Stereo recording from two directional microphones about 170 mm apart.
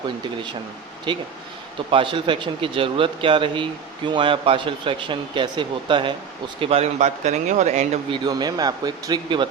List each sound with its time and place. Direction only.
1.1 s speech: 25° right (ahead or behind); by 7.9 s 45° right (ahead or behind)
8.1 s speech: 25° right (ahead or behind)